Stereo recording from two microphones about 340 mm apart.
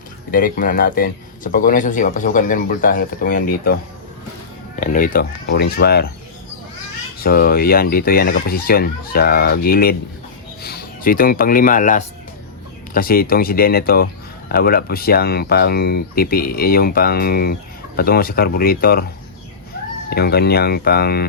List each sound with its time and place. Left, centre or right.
0.3 s speech: left
4.8 s speech: left
7.3 s speech: left
20.1 s speech: left